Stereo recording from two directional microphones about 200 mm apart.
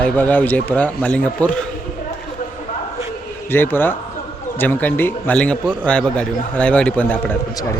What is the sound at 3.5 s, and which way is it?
Speech, 10° left (ahead or behind).